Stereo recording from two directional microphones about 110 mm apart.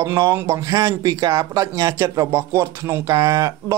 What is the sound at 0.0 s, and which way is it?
Speech, 30° right (ahead or behind).